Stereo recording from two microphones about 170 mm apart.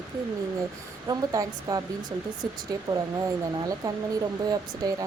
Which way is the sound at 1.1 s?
20° right (ahead or behind).